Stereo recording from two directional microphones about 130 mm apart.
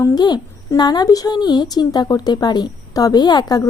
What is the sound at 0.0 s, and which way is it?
A child's voice, 30° left (ahead or behind).